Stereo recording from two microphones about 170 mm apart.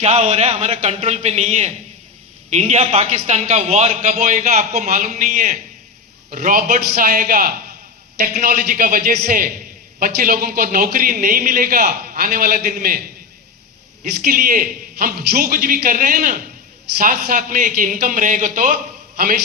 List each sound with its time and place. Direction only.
0.0 s a man's voice: 40° right (ahead or behind); by 13.0 s 55° right (ahead or behind)
14.0 s a man's voice: 55° right (ahead or behind)